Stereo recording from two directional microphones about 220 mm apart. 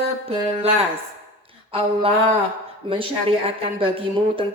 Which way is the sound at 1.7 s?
25° right (ahead or behind).